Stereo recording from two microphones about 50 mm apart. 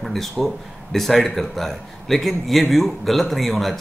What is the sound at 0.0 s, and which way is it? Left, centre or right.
A man's voice, centre.